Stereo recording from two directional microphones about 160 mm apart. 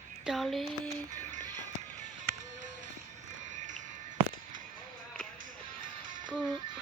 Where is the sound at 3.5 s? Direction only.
50° right (ahead or behind).